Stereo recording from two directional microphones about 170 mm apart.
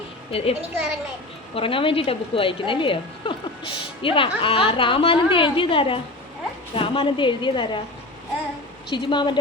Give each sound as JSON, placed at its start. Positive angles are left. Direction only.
{"t": 0.3, "sound": "a woman's voice", "side_deg": 35}
{"t": 1.5, "sound": "a woman's voice", "side_deg": 30}
{"t": 8.9, "sound": "a woman's voice", "side_deg": 30}